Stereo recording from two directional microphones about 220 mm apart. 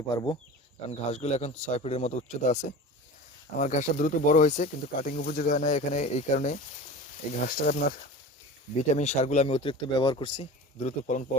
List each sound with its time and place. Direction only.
0.1 s speech: 15° left (ahead or behind)
0.9 s speech: 30° left (ahead or behind)